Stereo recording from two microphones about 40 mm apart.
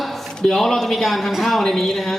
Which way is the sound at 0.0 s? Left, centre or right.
Centre.